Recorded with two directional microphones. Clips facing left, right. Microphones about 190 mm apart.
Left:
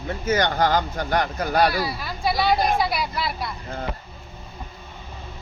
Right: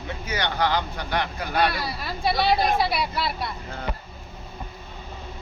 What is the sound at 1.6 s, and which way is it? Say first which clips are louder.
Speech: left 3 dB; centre (ahead or behind).